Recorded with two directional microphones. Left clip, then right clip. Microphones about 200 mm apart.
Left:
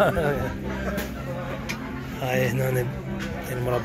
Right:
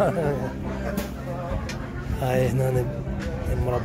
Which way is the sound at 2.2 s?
25° right (ahead or behind).